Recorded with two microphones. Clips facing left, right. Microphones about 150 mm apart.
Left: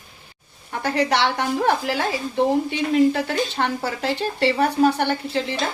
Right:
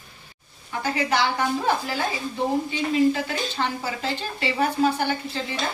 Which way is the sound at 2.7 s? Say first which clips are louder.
Left 3 dB; 65° left (ahead or behind).